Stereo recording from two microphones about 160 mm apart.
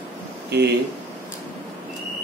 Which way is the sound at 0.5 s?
90° right.